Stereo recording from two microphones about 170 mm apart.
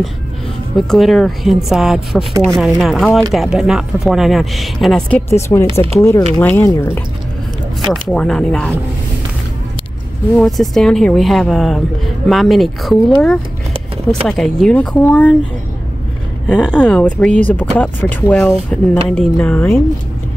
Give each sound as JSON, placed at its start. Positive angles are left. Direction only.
{"t": 0.7, "sound": "speech", "side_deg": 0}
{"t": 5.3, "sound": "speech", "side_deg": 15}
{"t": 7.9, "sound": "speech", "side_deg": 5}
{"t": 10.3, "sound": "speech", "side_deg": 0}
{"t": 16.4, "sound": "speech", "side_deg": 5}